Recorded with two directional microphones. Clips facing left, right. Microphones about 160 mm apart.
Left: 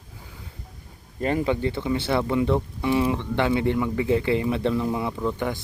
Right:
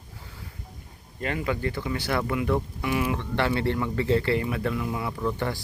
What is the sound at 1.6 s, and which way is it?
Speech, 20° left (ahead or behind).